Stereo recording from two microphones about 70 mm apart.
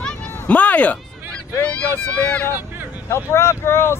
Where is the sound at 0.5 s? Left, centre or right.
Centre.